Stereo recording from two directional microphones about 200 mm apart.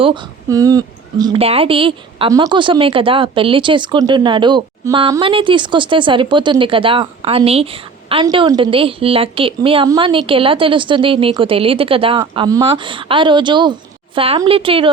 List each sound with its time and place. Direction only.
0.0 s a woman's voice: 20° right (ahead or behind)